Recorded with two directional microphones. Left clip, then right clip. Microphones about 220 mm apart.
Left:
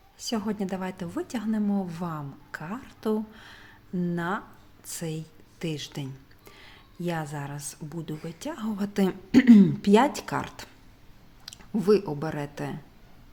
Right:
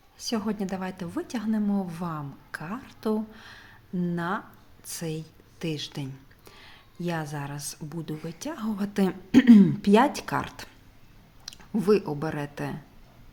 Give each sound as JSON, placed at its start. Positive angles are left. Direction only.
{"t": 0.2, "sound": "speech", "side_deg": 0}